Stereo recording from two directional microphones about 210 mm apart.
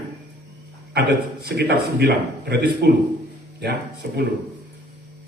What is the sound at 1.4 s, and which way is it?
A man's voice, 50° right (ahead or behind).